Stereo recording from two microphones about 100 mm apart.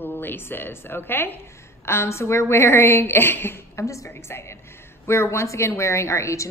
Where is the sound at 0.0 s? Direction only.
20° left (ahead or behind).